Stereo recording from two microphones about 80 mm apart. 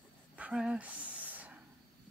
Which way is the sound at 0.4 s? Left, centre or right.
Centre.